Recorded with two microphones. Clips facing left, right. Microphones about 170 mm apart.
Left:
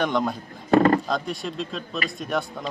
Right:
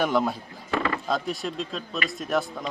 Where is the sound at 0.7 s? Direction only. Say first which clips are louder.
Left 10 dB; 45° left (ahead or behind).